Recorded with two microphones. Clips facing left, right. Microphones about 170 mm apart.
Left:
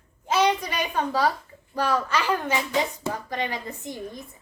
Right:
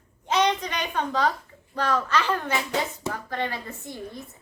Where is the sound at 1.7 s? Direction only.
10° left (ahead or behind).